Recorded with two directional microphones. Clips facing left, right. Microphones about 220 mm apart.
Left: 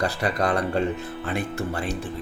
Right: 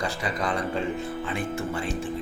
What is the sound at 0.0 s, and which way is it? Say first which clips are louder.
Speech: left 4 dB; 65° left (ahead or behind).